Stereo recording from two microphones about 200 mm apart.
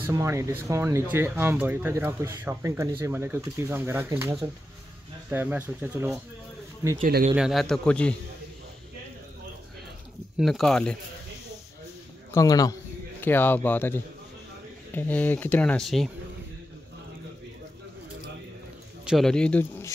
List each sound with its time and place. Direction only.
0.0 s speech: 15° right (ahead or behind)
7.0 s speech: 50° right (ahead or behind)
7.3 s a man's voice: centre (ahead or behind)
10.4 s a man's voice: centre (ahead or behind)
12.3 s a man's voice: 15° left (ahead or behind); by 16.1 s centre (ahead or behind)
19.0 s speech: centre (ahead or behind)